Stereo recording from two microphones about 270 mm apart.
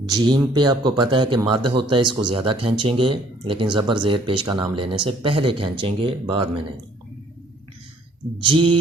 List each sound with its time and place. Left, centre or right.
0.0 s speech: centre
8.4 s speech: centre